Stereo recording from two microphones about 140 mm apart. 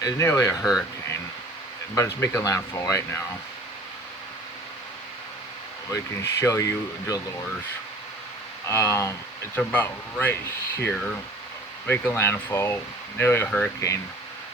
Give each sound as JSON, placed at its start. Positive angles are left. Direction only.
{"t": 0.0, "sound": "speech", "side_deg": 20}
{"t": 0.6, "sound": "speech", "side_deg": -5}
{"t": 2.0, "sound": "speech", "side_deg": 20}
{"t": 5.9, "sound": "speech", "side_deg": 25}
{"t": 8.6, "sound": "speech", "side_deg": 20}